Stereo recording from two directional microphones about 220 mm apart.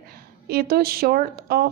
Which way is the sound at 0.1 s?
45° right (ahead or behind).